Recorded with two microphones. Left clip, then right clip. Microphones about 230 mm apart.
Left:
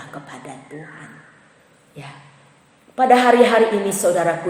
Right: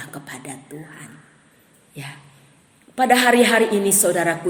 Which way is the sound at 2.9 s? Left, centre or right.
Right.